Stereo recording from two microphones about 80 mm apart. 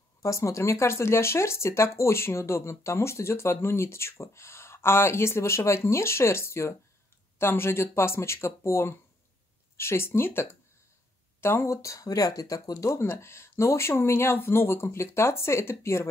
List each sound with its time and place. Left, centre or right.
0.2 s speech: left